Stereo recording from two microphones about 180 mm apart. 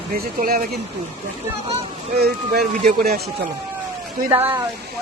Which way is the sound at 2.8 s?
55° right (ahead or behind).